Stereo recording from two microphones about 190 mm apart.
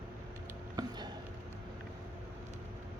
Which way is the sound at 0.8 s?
20° right (ahead or behind).